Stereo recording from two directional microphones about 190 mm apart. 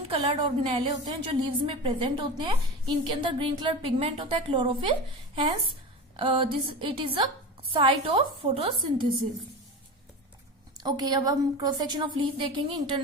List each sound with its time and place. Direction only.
0.1 s a woman's voice: 25° right (ahead or behind)
10.8 s a woman's voice: 20° right (ahead or behind)